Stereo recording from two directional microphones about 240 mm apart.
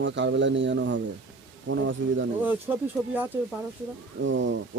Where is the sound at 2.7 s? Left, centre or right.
Centre.